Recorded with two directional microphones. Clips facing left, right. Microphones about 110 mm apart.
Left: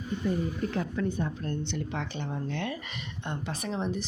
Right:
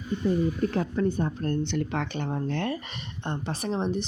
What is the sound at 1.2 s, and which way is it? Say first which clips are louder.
Speech: right 5 dB; 50° right (ahead or behind).